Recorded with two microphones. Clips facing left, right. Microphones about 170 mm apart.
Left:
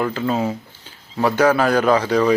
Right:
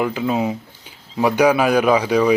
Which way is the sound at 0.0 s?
10° right (ahead or behind).